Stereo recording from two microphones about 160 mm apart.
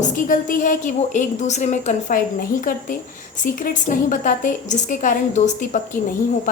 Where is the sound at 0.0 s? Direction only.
55° left (ahead or behind).